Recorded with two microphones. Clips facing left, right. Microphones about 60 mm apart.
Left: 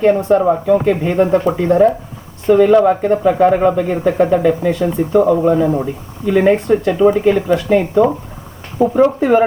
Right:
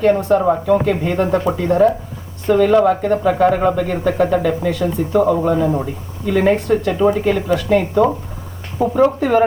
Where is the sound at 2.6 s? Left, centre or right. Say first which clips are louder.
Left 1 dB; centre.